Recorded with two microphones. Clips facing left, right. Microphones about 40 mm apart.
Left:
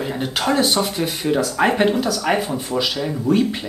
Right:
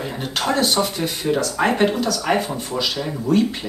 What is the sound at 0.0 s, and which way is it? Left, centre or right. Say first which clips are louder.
Speech: left 2 dB; centre.